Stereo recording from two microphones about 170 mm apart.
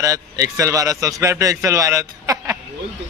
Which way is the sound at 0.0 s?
20° right (ahead or behind).